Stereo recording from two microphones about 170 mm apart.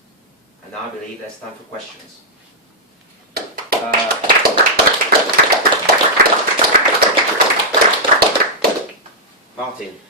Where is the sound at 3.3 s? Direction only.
60° right (ahead or behind).